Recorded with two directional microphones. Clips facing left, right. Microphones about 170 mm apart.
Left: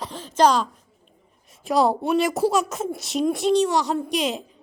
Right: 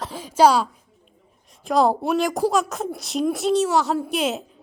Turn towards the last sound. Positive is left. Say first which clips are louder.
# right 1 dB
turn(degrees=-5)  # may be behind; listen again after turning